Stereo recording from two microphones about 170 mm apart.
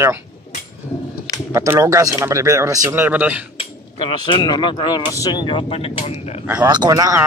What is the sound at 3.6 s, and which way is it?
Speech, 30° left (ahead or behind).